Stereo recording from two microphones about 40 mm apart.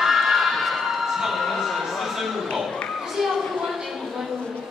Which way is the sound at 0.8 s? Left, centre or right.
Centre.